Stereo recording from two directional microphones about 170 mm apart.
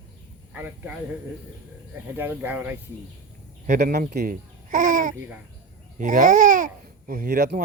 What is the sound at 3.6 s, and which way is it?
Speech, 45° right (ahead or behind).